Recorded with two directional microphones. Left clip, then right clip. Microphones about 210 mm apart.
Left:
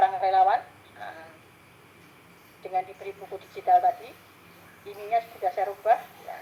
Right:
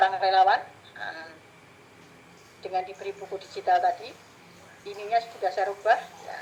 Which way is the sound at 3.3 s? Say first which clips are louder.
Right 3 dB; 40° right (ahead or behind).